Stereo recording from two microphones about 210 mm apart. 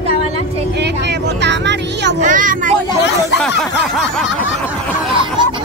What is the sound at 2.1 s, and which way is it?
Speech, 40° right (ahead or behind).